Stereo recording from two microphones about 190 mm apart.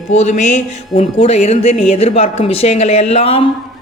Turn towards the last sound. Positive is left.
turn(degrees=30)  # may be behind; listen again after turning